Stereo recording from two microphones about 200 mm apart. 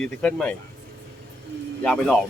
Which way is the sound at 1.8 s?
5° left (ahead or behind).